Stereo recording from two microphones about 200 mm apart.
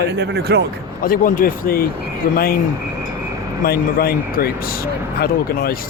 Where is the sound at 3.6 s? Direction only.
50° left (ahead or behind).